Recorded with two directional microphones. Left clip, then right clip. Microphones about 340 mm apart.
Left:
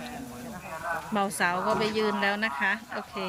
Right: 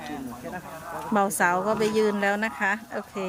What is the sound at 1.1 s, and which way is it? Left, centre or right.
A woman's voice, centre.